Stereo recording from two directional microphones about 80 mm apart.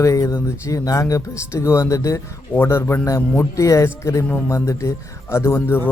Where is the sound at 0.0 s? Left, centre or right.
Left.